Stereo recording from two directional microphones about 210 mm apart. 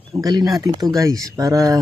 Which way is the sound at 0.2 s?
20° right (ahead or behind).